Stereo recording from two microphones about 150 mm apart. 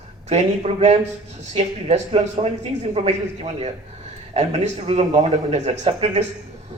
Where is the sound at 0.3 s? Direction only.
45° right (ahead or behind).